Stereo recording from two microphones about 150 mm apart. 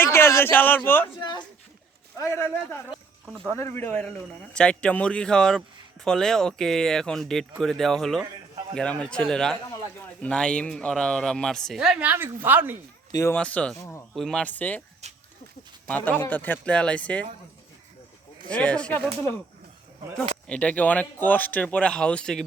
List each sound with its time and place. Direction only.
0.0 s a man's voice: 15° left (ahead or behind)
1.0 s a woman's voice: 30° left (ahead or behind)
2.1 s a man's voice: 20° left (ahead or behind); by 12.7 s 15° right (ahead or behind)
13.1 s speech: 25° left (ahead or behind)
13.3 s speech: 10° left (ahead or behind)
13.7 s a man's voice: 20° left (ahead or behind)
14.1 s speech: centre (ahead or behind)
15.0 s a sound: 45° right (ahead or behind)
15.9 s speech: 10° left (ahead or behind)
18.4 s speech: 5° left (ahead or behind)
20.5 s speech: 10° left (ahead or behind)